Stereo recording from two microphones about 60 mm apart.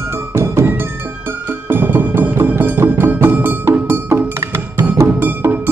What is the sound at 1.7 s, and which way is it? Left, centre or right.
Music, right.